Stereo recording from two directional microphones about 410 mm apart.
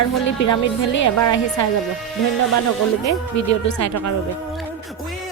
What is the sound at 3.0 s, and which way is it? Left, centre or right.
A woman's voice, left.